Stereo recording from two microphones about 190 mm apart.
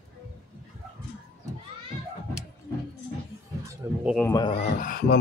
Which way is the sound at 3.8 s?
15° right (ahead or behind).